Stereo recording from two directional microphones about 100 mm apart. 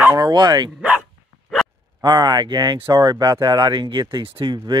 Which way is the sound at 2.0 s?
45° right (ahead or behind).